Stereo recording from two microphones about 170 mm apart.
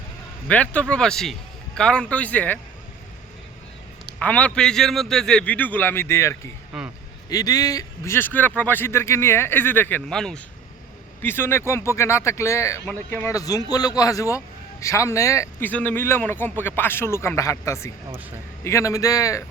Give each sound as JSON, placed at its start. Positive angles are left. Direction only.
{"t": 0.4, "sound": "a man's voice", "side_deg": 10}
{"t": 4.2, "sound": "a man's voice", "side_deg": 10}
{"t": 6.7, "sound": "a man's voice", "side_deg": -5}
{"t": 7.3, "sound": "a man's voice", "side_deg": 20}